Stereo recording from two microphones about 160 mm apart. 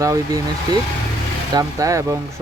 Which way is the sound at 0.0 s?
20° right (ahead or behind).